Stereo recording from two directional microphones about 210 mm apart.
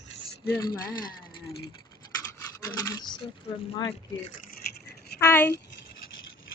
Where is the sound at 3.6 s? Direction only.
25° left (ahead or behind).